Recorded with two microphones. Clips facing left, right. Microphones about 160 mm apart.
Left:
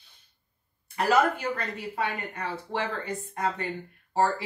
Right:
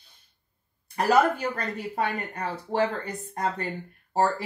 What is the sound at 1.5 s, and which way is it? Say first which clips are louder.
A woman's voice: right 1 dB; 40° right (ahead or behind).